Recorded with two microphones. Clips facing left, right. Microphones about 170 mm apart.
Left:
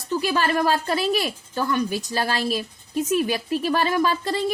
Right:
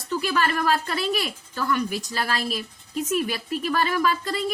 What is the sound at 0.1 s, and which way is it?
Speech, 30° left (ahead or behind).